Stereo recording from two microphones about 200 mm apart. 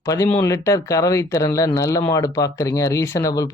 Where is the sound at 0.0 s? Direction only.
15° left (ahead or behind).